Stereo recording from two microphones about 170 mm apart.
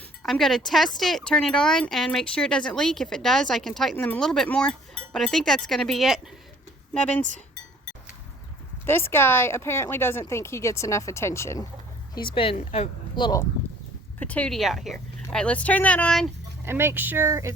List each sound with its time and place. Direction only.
0.2 s a woman's voice: centre (ahead or behind)
8.9 s a woman's voice: 15° left (ahead or behind)
12.1 s a woman's voice: 30° left (ahead or behind)
14.2 s a woman's voice: 10° left (ahead or behind)
16.6 s speech: 15° right (ahead or behind)